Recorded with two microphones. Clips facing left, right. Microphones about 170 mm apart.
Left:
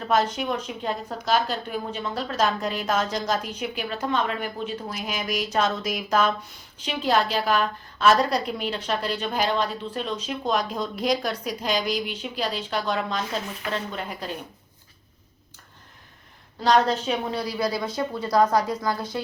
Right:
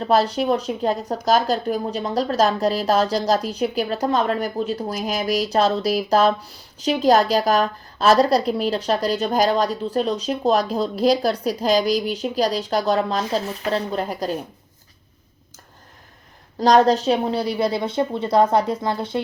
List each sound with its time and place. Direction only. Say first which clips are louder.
0.0 s speech: right 5 dB; 35° right (ahead or behind)
16.6 s a woman's voice: right 6 dB; 40° right (ahead or behind)